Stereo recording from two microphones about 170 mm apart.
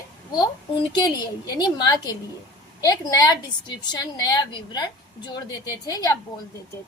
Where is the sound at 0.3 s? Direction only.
25° left (ahead or behind).